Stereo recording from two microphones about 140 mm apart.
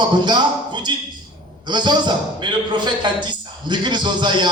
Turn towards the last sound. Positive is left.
turn(degrees=-35)  # may be behind; listen again after turning